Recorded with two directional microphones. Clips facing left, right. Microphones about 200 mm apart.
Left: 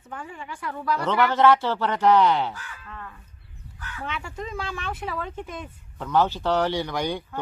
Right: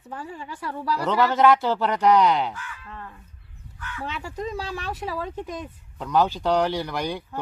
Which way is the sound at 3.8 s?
35° left (ahead or behind).